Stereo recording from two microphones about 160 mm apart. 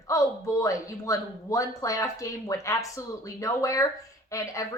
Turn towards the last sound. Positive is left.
turn(degrees=20)  # may be behind; listen again after turning